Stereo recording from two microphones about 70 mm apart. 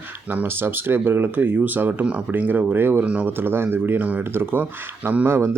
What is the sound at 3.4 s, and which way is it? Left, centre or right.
Speech, right.